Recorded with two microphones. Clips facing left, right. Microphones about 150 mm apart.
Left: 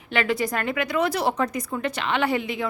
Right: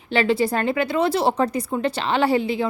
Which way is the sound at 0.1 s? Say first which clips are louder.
Right 4 dB; 30° right (ahead or behind).